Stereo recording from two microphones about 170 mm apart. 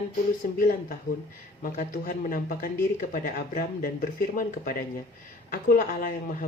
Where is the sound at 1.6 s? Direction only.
55° left (ahead or behind).